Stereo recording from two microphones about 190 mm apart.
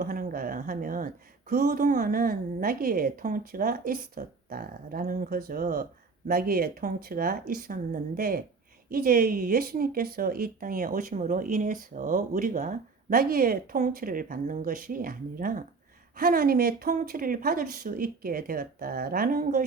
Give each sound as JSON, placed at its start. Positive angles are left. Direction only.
{"t": 0.0, "sound": "a woman's voice", "side_deg": -45}